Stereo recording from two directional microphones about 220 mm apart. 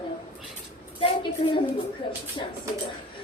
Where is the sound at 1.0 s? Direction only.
20° left (ahead or behind).